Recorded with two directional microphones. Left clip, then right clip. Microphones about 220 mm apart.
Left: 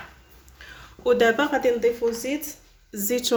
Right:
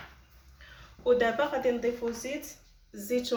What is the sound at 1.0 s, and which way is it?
Speech, 50° left (ahead or behind).